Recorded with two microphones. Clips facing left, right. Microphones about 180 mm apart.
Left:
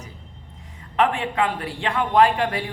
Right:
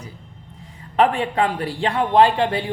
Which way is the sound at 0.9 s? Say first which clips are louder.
Right 3 dB; 35° right (ahead or behind).